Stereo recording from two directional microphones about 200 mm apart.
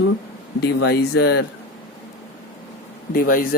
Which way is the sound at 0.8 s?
55° left (ahead or behind).